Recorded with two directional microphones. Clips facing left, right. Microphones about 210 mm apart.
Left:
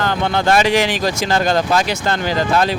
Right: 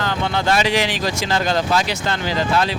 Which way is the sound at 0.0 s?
55° left (ahead or behind).